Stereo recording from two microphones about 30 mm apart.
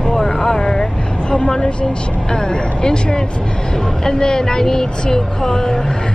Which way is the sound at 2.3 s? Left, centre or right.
Left.